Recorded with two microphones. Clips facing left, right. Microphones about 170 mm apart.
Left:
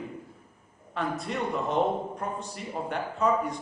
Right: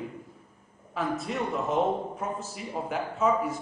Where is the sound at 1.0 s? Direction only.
Centre (ahead or behind).